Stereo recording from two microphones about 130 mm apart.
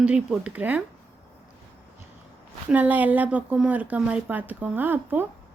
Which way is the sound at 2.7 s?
10° right (ahead or behind).